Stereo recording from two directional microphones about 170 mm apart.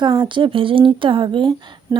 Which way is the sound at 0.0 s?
25° right (ahead or behind).